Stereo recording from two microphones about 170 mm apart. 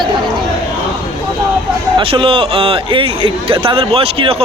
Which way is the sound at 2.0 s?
30° right (ahead or behind).